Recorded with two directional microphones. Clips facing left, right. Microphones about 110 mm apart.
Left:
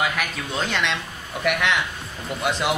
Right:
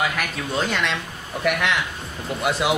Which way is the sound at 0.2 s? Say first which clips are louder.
Right 2 dB; centre (ahead or behind).